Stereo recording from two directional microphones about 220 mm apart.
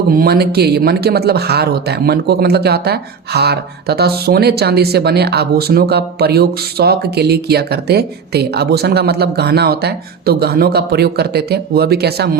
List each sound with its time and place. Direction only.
0.2 s speech: 45° right (ahead or behind)